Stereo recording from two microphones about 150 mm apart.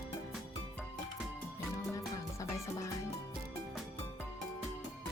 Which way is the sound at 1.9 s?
20° left (ahead or behind).